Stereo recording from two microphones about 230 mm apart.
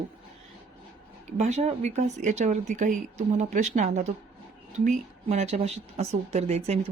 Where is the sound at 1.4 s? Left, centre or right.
Right.